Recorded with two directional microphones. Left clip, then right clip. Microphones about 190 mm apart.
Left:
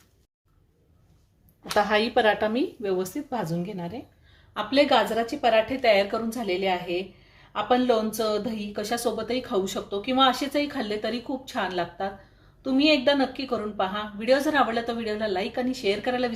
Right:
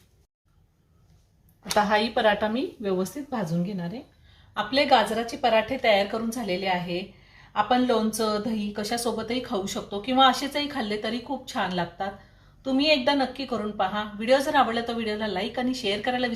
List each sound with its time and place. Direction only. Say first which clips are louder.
1.9 s a woman's voice: left 2 dB; 45° left (ahead or behind)